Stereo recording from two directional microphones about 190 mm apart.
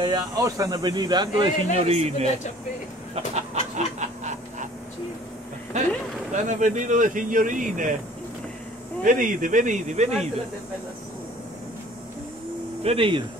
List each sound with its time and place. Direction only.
0.0 s speech: 20° right (ahead or behind)
3.7 s a sound: 40° right (ahead or behind)
5.7 s speech: 40° right (ahead or behind)
9.0 s speech: 45° right (ahead or behind)
12.8 s speech: 30° right (ahead or behind)